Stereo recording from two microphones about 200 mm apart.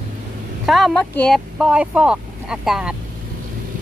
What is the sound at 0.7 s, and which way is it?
Speech, centre (ahead or behind).